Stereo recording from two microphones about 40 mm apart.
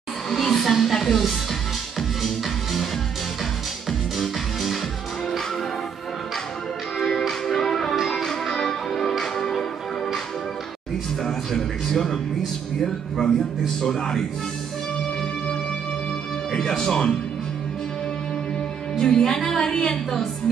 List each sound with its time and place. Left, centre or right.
0.3 s music: centre
4.2 s music: centre
7.0 s music: centre
11.2 s music: centre
12.8 s a sound: centre
16.5 s a woman's voice: centre
19.0 s a woman's voice: centre